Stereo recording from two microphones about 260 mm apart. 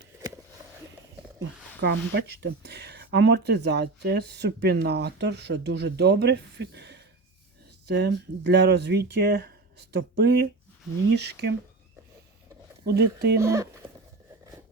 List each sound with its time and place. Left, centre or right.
1.4 s speech: right
12.8 s speech: right
13.4 s speech: centre